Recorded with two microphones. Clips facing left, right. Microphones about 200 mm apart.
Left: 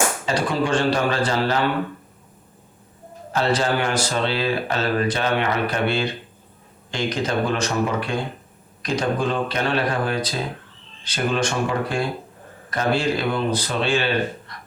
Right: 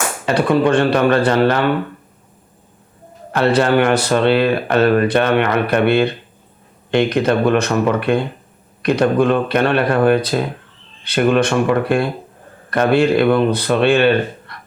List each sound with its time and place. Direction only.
0.3 s speech: 60° right (ahead or behind)
3.3 s speech: 60° right (ahead or behind)